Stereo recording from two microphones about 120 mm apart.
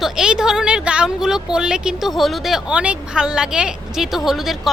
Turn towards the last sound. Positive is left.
turn(degrees=0)  # may be behind; listen again after turning